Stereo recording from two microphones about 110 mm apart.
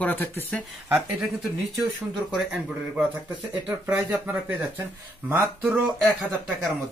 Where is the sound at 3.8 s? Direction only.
20° right (ahead or behind).